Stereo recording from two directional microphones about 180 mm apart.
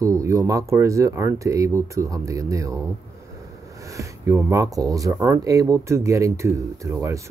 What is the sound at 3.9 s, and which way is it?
Speech, 15° right (ahead or behind).